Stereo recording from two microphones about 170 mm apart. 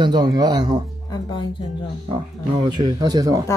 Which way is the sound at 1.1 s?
25° left (ahead or behind).